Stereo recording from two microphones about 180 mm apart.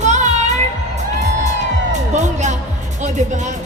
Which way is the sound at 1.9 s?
40° right (ahead or behind).